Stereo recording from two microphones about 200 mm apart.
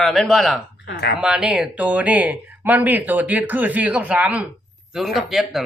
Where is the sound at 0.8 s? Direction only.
55° left (ahead or behind).